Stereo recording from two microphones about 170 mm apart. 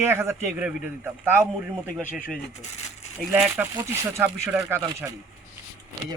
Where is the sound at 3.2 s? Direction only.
5° right (ahead or behind).